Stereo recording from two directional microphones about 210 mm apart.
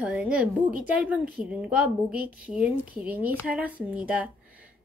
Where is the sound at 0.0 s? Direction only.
5° right (ahead or behind).